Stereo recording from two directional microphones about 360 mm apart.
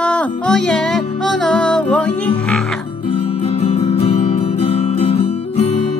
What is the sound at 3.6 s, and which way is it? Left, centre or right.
Music, centre.